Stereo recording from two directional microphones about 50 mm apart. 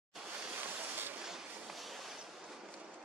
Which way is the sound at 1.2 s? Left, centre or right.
Centre.